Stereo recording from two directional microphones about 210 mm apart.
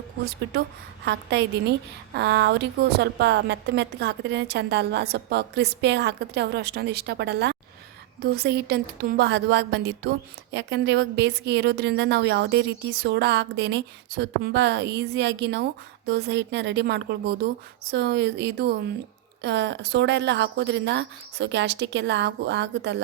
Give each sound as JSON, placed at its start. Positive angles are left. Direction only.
{"t": 1.0, "sound": "a woman's voice", "side_deg": -55}